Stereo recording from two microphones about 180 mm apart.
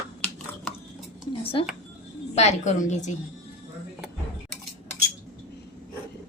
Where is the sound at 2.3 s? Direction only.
40° left (ahead or behind).